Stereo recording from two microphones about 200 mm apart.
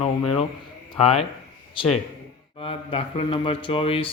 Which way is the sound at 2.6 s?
30° left (ahead or behind).